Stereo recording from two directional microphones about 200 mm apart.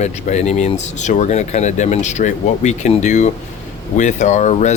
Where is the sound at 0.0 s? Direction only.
35° left (ahead or behind).